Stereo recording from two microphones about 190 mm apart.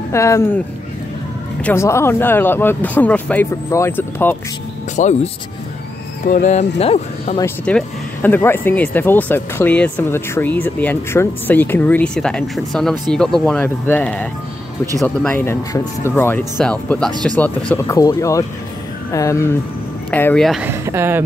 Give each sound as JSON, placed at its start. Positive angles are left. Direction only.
{"t": 0.1, "sound": "speech", "side_deg": 15}
{"t": 1.6, "sound": "speech", "side_deg": 10}
{"t": 4.9, "sound": "speech", "side_deg": 40}
{"t": 7.6, "sound": "speech", "side_deg": 5}
{"t": 17.9, "sound": "speech", "side_deg": 15}
{"t": 20.6, "sound": "speech", "side_deg": -15}